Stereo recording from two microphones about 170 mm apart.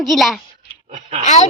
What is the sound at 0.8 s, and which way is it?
Speech, 45° right (ahead or behind).